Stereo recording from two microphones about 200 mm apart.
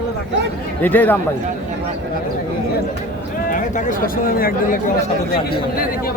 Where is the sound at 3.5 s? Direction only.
40° left (ahead or behind).